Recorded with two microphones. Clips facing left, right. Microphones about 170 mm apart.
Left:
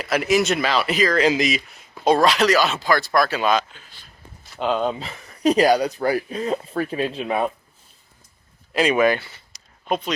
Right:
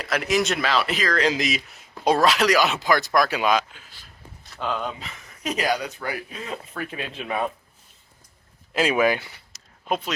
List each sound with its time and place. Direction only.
0.0 s speech: 5° left (ahead or behind)
4.6 s speech: 25° left (ahead or behind)
8.7 s speech: 5° right (ahead or behind)
9.5 s a sound: 5° right (ahead or behind)